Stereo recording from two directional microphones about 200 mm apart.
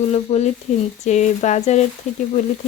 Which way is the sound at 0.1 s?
30° left (ahead or behind).